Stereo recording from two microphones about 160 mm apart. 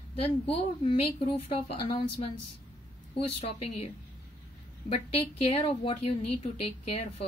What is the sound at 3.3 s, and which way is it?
A woman's voice, 40° left (ahead or behind).